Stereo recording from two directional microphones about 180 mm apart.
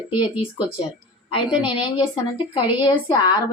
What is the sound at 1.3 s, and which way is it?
Speech, 25° left (ahead or behind).